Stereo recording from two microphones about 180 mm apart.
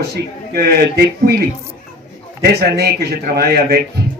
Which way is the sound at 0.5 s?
60° right (ahead or behind).